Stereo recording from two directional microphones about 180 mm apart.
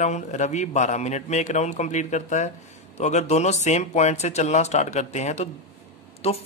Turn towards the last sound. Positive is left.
turn(degrees=35)  # may be behind; listen again after turning